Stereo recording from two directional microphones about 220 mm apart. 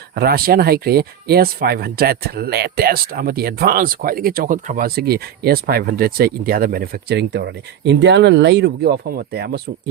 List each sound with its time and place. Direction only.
0.1 s speech: 45° right (ahead or behind)